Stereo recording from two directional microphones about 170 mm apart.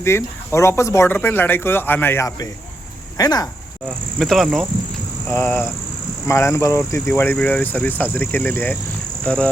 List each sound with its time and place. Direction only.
0.0 s speech: 15° left (ahead or behind)
3.8 s speech: centre (ahead or behind)
5.3 s speech: 15° left (ahead or behind)